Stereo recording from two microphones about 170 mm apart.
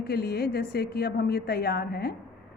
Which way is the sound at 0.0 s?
65° left (ahead or behind).